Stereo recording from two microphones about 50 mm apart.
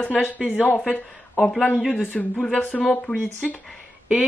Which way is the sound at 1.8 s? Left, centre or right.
Centre.